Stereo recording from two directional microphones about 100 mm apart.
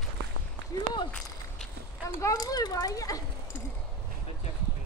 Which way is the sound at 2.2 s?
35° left (ahead or behind).